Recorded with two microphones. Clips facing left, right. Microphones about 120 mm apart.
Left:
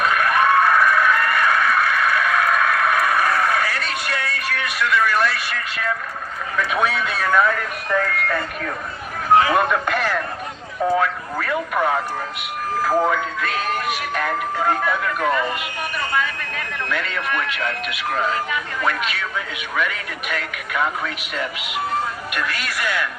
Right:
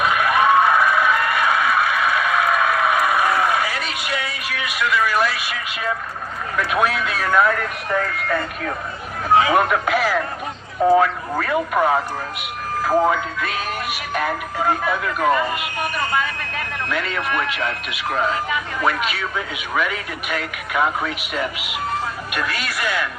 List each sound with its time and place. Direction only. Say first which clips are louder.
0.0 s a sound: right 1 dB; 10° right (ahead or behind)
6.6 s a man's voice: right 1 dB; 5° right (ahead or behind)
9.3 s a man's voice: even; 15° right (ahead or behind)
9.6 s a man's voice: right 2 dB; 5° right (ahead or behind)
12.8 s a man's voice: right 2 dB; 15° right (ahead or behind)
16.9 s a man's voice: right 1 dB; 5° right (ahead or behind)